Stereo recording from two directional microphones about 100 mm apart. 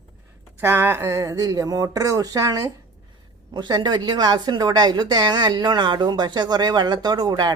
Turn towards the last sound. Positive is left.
turn(degrees=-40)  # may be behind; listen again after turning